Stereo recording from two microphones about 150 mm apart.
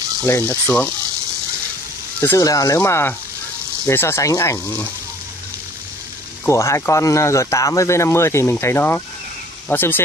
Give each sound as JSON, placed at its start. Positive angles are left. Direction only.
{"t": 0.2, "sound": "speech", "side_deg": 15}
{"t": 2.1, "sound": "speech", "side_deg": 15}
{"t": 2.4, "sound": "speech", "side_deg": 25}
{"t": 6.4, "sound": "speech", "side_deg": 20}